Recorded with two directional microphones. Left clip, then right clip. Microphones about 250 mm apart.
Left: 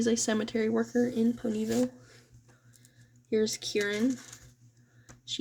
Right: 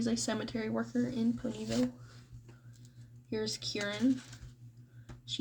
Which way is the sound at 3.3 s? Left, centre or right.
Left.